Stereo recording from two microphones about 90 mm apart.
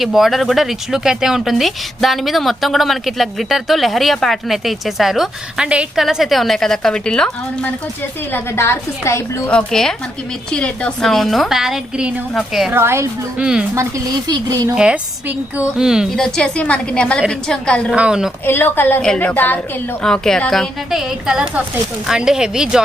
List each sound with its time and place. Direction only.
0.0 s speech: centre (ahead or behind)
8.3 s a woman's voice: 30° left (ahead or behind)
9.5 s a woman's voice: 10° left (ahead or behind); by 12.1 s 5° right (ahead or behind)
12.7 s a woman's voice: 30° right (ahead or behind)
13.4 s speech: 10° right (ahead or behind)
13.7 s speech: 40° right (ahead or behind)
15.8 s speech: 5° right (ahead or behind)
16.1 s a woman's voice: 5° left (ahead or behind)
17.9 s speech: 10° right (ahead or behind)
18.4 s a woman's voice: 25° left (ahead or behind)
19.0 s a woman's voice: 10° left (ahead or behind)
20.0 s speech: 5° left (ahead or behind); by 22.8 s 10° right (ahead or behind)